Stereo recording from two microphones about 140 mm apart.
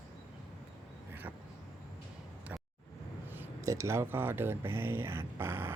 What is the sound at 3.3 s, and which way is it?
Speech, 20° right (ahead or behind).